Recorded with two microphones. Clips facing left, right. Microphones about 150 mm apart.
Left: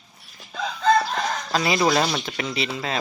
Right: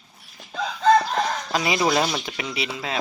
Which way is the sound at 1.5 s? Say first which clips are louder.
Left 1 dB; 10° right (ahead or behind).